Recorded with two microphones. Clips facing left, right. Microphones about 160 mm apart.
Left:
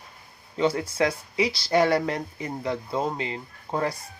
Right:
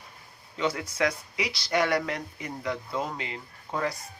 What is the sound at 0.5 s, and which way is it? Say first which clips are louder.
Speech: left 5 dB; 30° left (ahead or behind).